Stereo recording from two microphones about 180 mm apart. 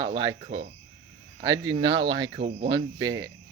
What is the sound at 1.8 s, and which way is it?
Speech, 25° right (ahead or behind).